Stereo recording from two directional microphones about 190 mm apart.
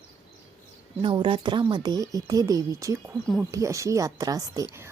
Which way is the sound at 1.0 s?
25° right (ahead or behind).